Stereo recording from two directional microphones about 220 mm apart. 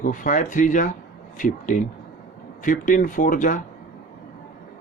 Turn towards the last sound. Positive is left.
turn(degrees=35)  # may be behind; listen again after turning